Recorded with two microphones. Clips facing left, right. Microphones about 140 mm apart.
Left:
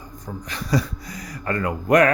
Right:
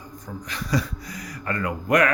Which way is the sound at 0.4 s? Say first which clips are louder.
Left 3 dB; 35° left (ahead or behind).